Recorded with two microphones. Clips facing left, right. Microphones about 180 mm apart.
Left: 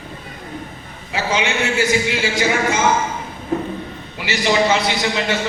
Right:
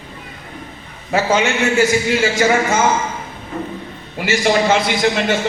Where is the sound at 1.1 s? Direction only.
45° right (ahead or behind).